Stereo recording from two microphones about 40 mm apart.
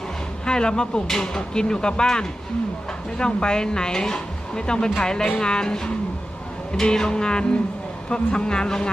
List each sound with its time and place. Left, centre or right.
0.4 s speech: left